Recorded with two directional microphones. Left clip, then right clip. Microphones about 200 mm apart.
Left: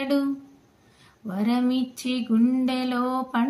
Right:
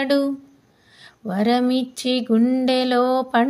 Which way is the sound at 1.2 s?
45° right (ahead or behind).